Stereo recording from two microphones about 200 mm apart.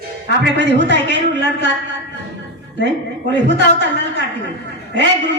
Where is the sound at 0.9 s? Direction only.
60° right (ahead or behind).